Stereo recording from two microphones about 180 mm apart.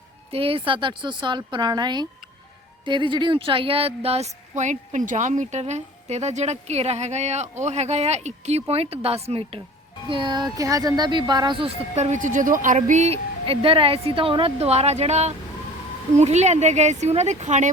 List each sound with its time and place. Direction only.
0.3 s speech: 30° right (ahead or behind)